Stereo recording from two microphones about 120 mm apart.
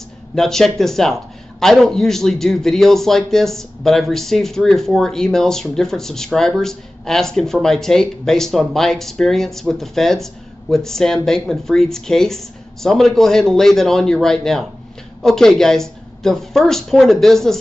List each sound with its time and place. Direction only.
0.4 s a man's voice: 5° left (ahead or behind)